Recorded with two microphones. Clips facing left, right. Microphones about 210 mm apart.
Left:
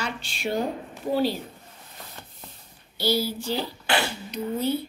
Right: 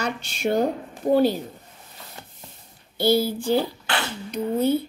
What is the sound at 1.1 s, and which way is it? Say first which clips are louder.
Speech: right 6 dB; 50° right (ahead or behind).